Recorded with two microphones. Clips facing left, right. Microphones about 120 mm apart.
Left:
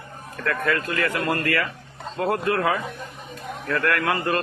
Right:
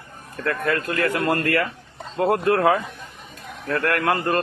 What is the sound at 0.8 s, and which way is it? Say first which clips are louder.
Speech: right 3 dB; 55° right (ahead or behind).